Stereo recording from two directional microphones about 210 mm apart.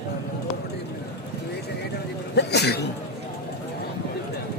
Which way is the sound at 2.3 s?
50° left (ahead or behind).